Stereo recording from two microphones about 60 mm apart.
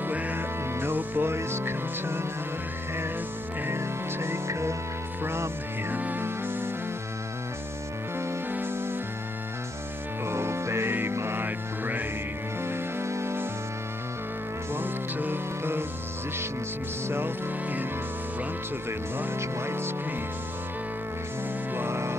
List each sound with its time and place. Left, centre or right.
0.0 s music: right
3.6 s music: right
5.9 s music: right
8.5 s music: right
10.2 s music: right
11.4 s music: right
12.6 s music: right
14.7 s music: right
17.1 s music: right
18.9 s speech: right
21.7 s music: right